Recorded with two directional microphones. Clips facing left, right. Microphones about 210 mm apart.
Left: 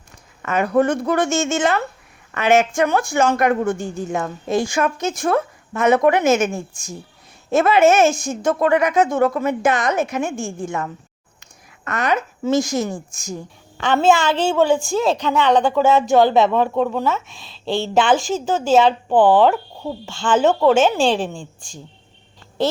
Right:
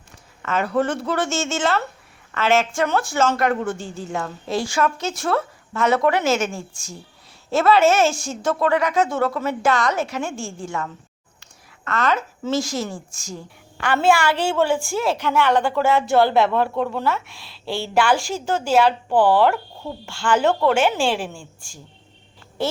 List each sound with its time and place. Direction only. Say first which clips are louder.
0.4 s a woman's voice: left 4 dB; 15° left (ahead or behind)